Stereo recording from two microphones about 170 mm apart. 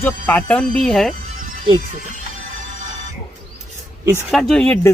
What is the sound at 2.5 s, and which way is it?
Music, 45° right (ahead or behind).